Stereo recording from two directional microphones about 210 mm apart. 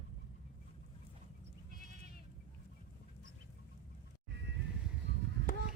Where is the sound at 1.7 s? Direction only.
45° left (ahead or behind).